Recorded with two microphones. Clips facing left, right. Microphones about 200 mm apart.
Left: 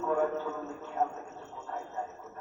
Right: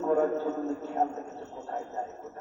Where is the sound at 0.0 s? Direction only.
40° right (ahead or behind).